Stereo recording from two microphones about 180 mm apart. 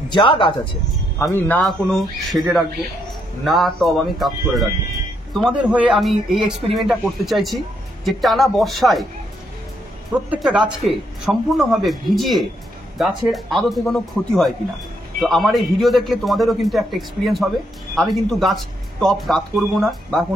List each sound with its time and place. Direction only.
0.1 s speech: 25° left (ahead or behind)
1.1 s speech: 15° left (ahead or behind)
1.6 s speech: centre (ahead or behind)
10.3 s speech: 5° right (ahead or behind)